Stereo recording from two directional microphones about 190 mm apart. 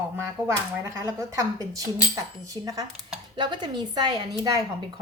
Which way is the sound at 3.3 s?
25° right (ahead or behind).